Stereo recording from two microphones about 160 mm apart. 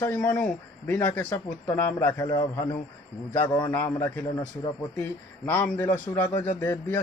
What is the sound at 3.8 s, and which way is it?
A man's voice, 20° left (ahead or behind).